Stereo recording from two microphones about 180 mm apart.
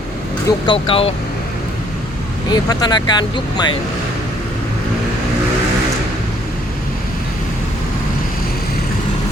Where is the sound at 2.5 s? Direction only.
20° left (ahead or behind).